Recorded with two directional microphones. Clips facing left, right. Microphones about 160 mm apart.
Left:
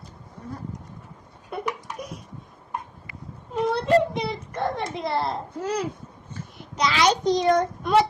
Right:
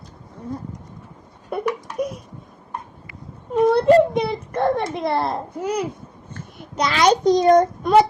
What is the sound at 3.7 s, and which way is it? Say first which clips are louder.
A child's voice: right 6 dB; 55° right (ahead or behind).